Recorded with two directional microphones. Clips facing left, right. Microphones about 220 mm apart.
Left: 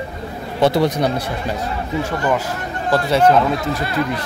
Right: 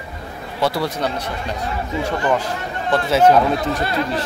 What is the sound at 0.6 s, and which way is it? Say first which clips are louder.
Speech: left 5 dB; 20° left (ahead or behind).